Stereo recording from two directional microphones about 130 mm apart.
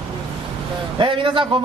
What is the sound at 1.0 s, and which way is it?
Speech, 40° right (ahead or behind).